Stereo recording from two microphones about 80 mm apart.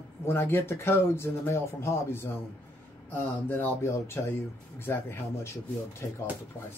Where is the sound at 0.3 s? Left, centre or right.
Left.